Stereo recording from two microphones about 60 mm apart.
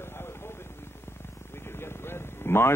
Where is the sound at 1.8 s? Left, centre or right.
Left.